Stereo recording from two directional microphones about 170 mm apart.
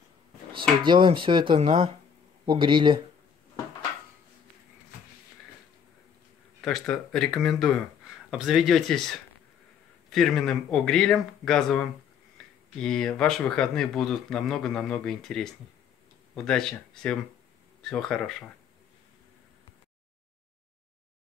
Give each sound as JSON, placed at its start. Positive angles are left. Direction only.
{"t": 0.6, "sound": "speech", "side_deg": -30}
{"t": 6.6, "sound": "speech", "side_deg": 5}